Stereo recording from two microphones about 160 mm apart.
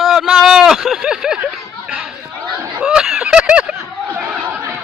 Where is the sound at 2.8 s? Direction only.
5° right (ahead or behind).